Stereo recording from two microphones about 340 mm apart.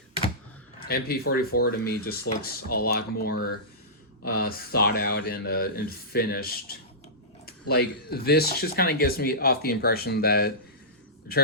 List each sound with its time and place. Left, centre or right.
0.9 s speech: left